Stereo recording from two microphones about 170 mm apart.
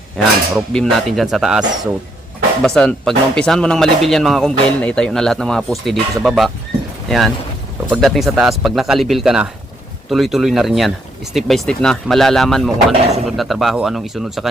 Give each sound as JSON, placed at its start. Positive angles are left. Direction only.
{"t": 0.2, "sound": "speech", "side_deg": 5}
{"t": 12.9, "sound": "speech", "side_deg": -35}
{"t": 13.2, "sound": "speech", "side_deg": 0}